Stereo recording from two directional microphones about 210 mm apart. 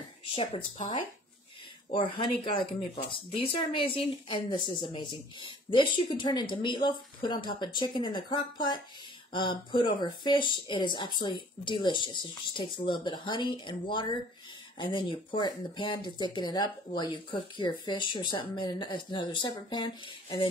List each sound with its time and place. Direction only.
0.4 s speech: 25° left (ahead or behind)
1.9 s speech: 25° left (ahead or behind)